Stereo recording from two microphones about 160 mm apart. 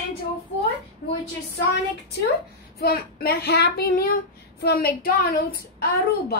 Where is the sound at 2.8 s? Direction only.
75° left (ahead or behind).